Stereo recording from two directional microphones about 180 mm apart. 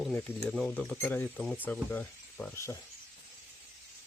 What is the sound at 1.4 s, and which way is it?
Speech, 5° right (ahead or behind).